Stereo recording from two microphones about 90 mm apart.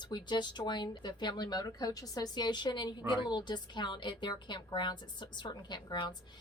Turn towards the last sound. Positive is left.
turn(degrees=55)  # may be behind; listen again after turning